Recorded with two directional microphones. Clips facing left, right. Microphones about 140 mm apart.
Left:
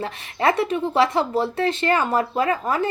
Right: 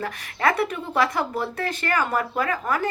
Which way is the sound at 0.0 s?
25° left (ahead or behind).